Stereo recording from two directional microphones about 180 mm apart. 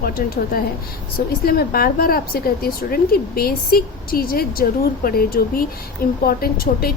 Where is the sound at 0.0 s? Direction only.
60° left (ahead or behind).